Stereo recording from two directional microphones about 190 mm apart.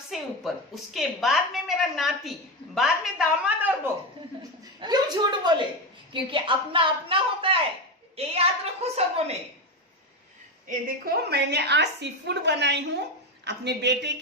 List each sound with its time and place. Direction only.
0.1 s a woman's voice: centre (ahead or behind)
4.8 s a woman's voice: 20° right (ahead or behind)
10.7 s a woman's voice: 50° right (ahead or behind)